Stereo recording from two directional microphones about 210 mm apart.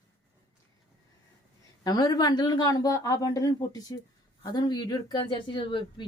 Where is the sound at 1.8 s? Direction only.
20° left (ahead or behind).